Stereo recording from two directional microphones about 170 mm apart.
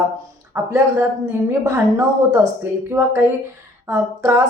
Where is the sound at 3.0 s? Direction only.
20° right (ahead or behind).